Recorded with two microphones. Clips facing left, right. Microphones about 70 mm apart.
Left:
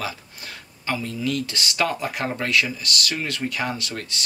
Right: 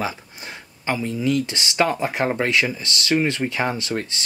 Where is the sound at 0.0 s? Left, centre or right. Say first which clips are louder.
Right 4 dB; right.